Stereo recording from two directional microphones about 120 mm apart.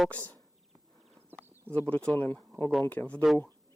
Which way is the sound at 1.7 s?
15° left (ahead or behind).